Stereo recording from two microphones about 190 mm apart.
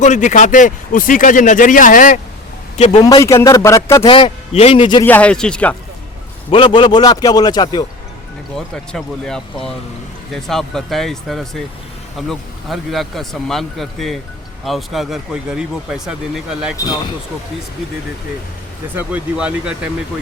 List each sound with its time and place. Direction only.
0.0 s speech: 40° left (ahead or behind)
2.7 s a man's voice: 35° left (ahead or behind)
3.0 s a man's voice: 20° left (ahead or behind)
4.0 s a man's voice: 25° left (ahead or behind)
5.0 s speech: 10° left (ahead or behind)
6.5 s a man's voice: 25° left (ahead or behind)
8.5 s speech: 5° left (ahead or behind)
16.7 s a man's voice: 20° left (ahead or behind)
18.9 s speech: 5° right (ahead or behind)